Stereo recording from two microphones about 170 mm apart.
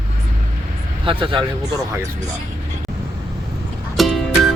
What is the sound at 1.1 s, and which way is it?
Speech, 30° right (ahead or behind).